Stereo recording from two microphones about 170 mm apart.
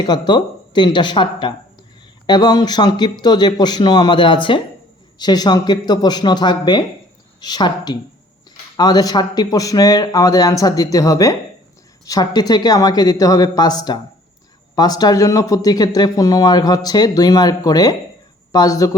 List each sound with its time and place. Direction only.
0.0 s a man's voice: 25° left (ahead or behind)